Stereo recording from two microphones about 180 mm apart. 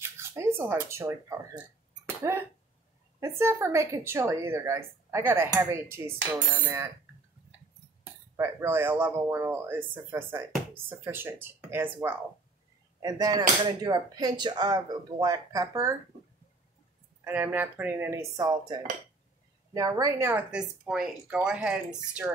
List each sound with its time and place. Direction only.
0.0 s a sound: 15° right (ahead or behind)
0.6 s speech: 15° right (ahead or behind)
2.0 s a sound: 15° right (ahead or behind)
3.2 s speech: 15° right (ahead or behind)
8.0 s speech: 15° right (ahead or behind)
17.2 s speech: 10° right (ahead or behind)
22.2 s speech: 15° right (ahead or behind)